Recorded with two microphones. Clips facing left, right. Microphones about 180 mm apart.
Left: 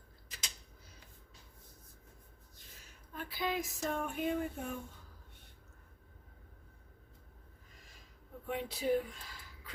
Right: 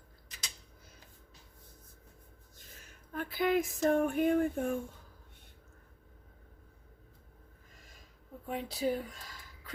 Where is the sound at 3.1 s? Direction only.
50° right (ahead or behind).